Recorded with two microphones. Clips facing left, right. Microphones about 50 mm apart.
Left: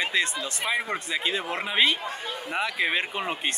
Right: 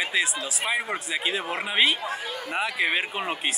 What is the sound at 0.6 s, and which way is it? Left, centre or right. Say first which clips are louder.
Speech: even; centre.